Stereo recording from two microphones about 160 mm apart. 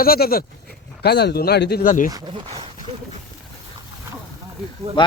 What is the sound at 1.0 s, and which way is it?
Speech, 90° left.